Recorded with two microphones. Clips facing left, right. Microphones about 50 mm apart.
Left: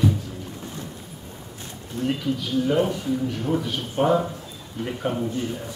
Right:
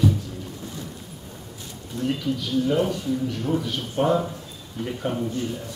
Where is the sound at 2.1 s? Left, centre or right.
Centre.